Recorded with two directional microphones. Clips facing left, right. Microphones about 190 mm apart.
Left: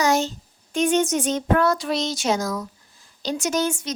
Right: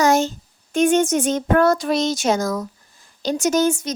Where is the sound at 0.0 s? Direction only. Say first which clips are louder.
Right 4 dB; 50° right (ahead or behind).